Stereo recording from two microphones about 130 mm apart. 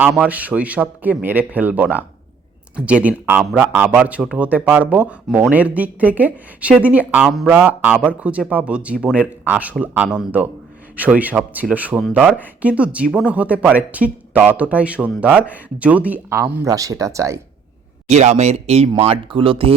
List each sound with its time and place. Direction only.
0.2 s speech: 10° right (ahead or behind)
16.6 s speech: 25° right (ahead or behind)
18.1 s speech: 55° right (ahead or behind)